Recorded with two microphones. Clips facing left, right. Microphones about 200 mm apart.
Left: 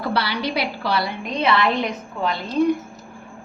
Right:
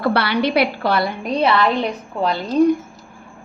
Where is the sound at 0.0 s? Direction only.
60° right (ahead or behind).